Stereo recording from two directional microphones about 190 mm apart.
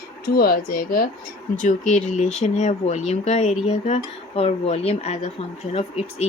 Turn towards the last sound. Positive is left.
turn(degrees=35)  # may be behind; listen again after turning